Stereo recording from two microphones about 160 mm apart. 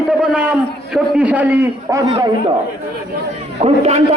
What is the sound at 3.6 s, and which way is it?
Speech, 40° right (ahead or behind).